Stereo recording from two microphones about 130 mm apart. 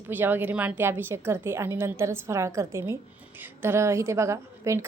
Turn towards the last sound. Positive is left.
turn(degrees=-20)  # may be behind; listen again after turning